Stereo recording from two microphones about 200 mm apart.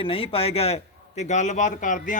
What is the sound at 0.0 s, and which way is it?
A man's voice, 30° left (ahead or behind).